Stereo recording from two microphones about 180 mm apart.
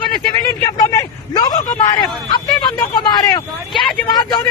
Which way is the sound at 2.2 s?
25° left (ahead or behind).